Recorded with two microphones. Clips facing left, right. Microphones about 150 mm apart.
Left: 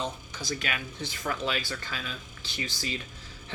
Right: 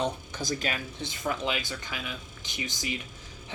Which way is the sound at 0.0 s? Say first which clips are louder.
Right 4 dB; 55° right (ahead or behind).